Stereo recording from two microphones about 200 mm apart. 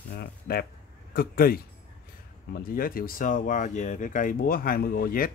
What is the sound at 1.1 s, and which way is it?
Speech, 45° left (ahead or behind).